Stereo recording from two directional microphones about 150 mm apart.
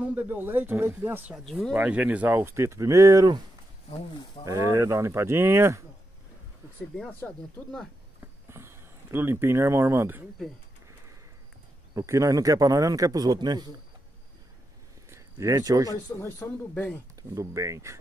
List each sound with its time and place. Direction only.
0.0 s speech: 10° right (ahead or behind)
1.3 s speech: centre (ahead or behind)
1.8 s speech: 10° right (ahead or behind)
4.5 s a man's voice: 20° right (ahead or behind)
7.2 s speech: 5° left (ahead or behind)
8.2 s a sound: 15° right (ahead or behind)
11.9 s a man's voice: 20° right (ahead or behind)
15.0 s speech: 20° right (ahead or behind)
16.2 s speech: 20° left (ahead or behind)
17.1 s a man's voice: 20° right (ahead or behind)